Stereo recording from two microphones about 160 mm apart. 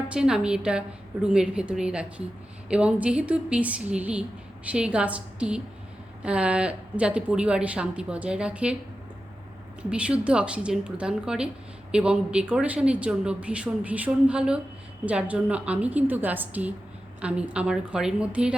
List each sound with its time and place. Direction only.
0.1 s a woman's voice: 5° right (ahead or behind)
9.9 s a woman's voice: 5° right (ahead or behind)